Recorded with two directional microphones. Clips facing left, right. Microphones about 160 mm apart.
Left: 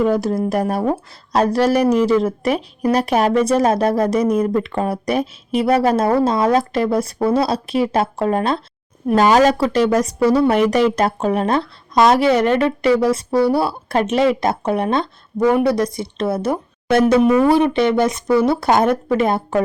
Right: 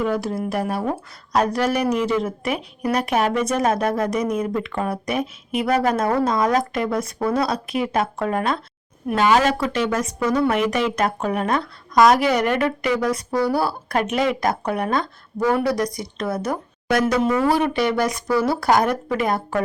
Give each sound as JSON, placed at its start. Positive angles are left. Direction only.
{"t": 0.0, "sound": "a woman's voice", "side_deg": 40}